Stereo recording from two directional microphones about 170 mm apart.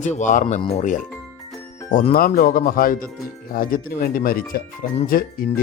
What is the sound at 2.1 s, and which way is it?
A man's voice, 60° left (ahead or behind).